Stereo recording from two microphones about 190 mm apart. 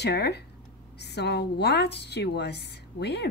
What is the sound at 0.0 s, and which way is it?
A woman's voice, 60° left (ahead or behind).